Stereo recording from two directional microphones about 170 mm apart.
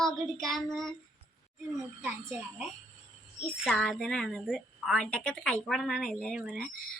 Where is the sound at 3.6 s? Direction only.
Centre (ahead or behind).